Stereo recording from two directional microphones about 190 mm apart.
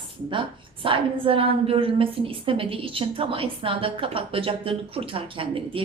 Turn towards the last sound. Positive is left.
turn(degrees=-30)  # may be behind; listen again after turning